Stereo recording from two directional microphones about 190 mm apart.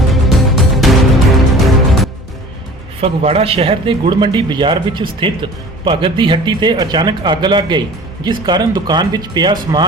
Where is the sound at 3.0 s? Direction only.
30° right (ahead or behind).